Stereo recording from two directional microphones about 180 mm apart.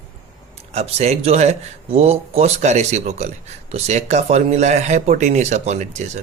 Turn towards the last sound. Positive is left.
turn(degrees=-40)  # may be behind; listen again after turning